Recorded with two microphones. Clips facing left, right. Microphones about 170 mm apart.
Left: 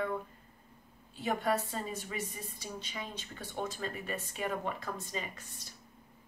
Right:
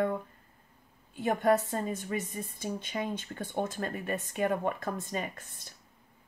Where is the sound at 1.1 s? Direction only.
50° right (ahead or behind).